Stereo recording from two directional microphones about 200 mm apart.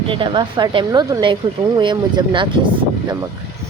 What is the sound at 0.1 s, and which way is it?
A woman's voice, 25° right (ahead or behind).